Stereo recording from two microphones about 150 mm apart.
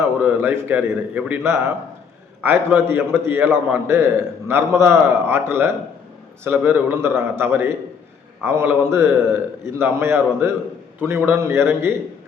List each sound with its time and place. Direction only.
0.2 s a man's voice: 10° right (ahead or behind)